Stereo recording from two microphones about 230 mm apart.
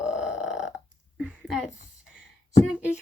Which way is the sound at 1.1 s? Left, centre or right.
Centre.